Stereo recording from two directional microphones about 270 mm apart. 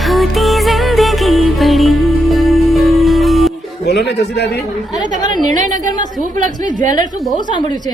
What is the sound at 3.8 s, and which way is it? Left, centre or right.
Speech, left.